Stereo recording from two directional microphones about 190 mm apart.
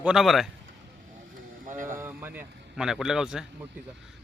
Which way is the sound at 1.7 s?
45° right (ahead or behind).